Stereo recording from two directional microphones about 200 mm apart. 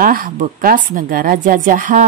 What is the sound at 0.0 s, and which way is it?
A woman's voice, 45° right (ahead or behind).